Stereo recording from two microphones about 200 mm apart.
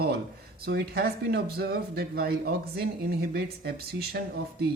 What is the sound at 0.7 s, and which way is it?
Speech, 50° right (ahead or behind).